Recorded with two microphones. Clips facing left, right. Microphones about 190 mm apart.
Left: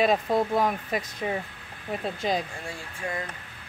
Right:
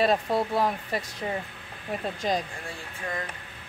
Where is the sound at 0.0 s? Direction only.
15° left (ahead or behind).